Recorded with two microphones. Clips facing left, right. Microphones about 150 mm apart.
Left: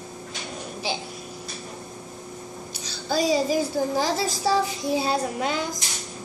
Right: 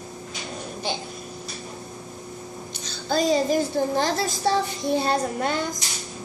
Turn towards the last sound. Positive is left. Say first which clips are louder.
# right 1 dB
turn(degrees=5)  # may be behind; listen again after turning